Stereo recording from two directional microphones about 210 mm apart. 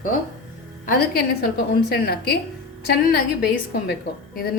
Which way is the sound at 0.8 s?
50° left (ahead or behind).